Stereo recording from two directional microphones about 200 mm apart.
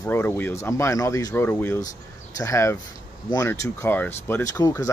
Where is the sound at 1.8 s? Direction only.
40° left (ahead or behind).